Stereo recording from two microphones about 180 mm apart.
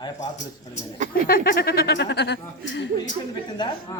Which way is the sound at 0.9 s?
40° right (ahead or behind).